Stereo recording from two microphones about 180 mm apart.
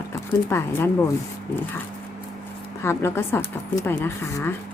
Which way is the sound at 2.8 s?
15° left (ahead or behind).